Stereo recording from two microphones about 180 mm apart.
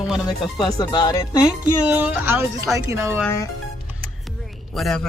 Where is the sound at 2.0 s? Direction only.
10° right (ahead or behind).